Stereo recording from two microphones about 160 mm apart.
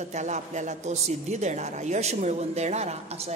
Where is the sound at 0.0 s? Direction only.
45° right (ahead or behind).